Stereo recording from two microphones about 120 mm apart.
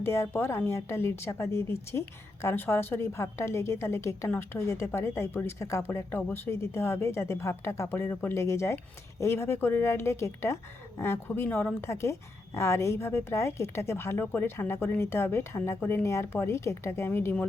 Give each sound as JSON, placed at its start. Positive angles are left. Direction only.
{"t": 0.0, "sound": "a woman's voice", "side_deg": 20}